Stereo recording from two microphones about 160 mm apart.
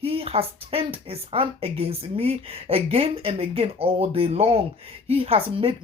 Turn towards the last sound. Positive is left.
turn(degrees=-35)  # may be behind; listen again after turning